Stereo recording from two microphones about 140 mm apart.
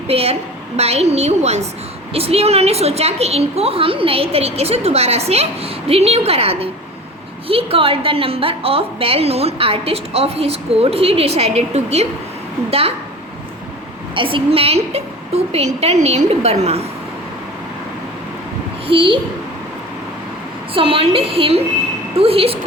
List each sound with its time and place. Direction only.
0.1 s a woman's voice: 45° right (ahead or behind)
14.2 s a woman's voice: 40° right (ahead or behind)
18.9 s a child's voice: 35° right (ahead or behind)
20.7 s a woman's voice: 40° right (ahead or behind)